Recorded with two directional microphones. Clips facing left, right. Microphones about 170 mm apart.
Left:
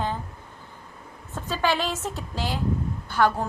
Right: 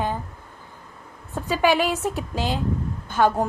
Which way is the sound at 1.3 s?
15° right (ahead or behind).